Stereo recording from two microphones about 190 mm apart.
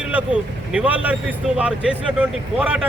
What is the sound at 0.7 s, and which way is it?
Speech, 5° right (ahead or behind).